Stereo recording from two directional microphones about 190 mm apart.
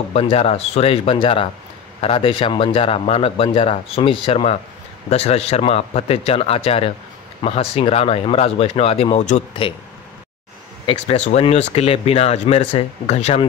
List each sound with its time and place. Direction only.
0.1 s speech: 30° left (ahead or behind)
9.6 s speech: 25° left (ahead or behind)
10.9 s speech: 35° left (ahead or behind)